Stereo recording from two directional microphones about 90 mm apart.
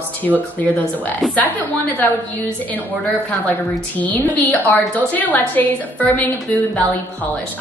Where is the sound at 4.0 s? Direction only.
20° left (ahead or behind).